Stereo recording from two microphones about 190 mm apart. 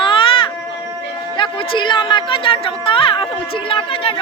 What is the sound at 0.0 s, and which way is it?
Baby cry, 25° left (ahead or behind).